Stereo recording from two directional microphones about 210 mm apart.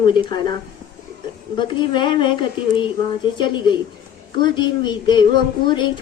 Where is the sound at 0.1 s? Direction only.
20° left (ahead or behind).